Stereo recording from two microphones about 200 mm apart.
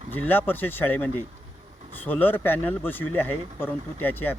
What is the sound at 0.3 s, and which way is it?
Speech, 10° left (ahead or behind).